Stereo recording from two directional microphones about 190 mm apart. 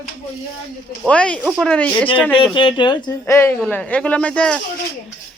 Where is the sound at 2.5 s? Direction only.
25° left (ahead or behind); by 4.6 s 5° left (ahead or behind).